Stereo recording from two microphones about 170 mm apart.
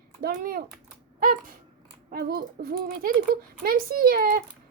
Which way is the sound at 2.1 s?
65° right (ahead or behind).